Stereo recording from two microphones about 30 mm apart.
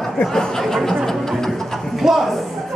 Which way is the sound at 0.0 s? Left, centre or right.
Centre.